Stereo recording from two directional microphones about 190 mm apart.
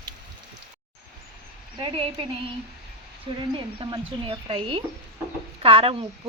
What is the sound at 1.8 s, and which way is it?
Speech, 30° right (ahead or behind).